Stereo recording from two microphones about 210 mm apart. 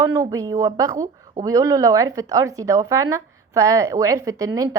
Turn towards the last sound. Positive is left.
turn(degrees=-15)  # may be behind; listen again after turning